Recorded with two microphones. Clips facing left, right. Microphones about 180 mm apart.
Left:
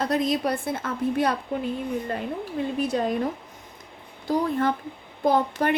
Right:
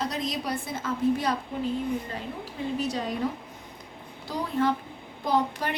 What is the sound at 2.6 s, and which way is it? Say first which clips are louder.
Speech: left 4 dB; 60° left (ahead or behind).